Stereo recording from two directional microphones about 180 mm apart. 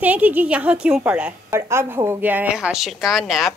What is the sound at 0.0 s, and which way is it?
A woman's voice, 10° right (ahead or behind).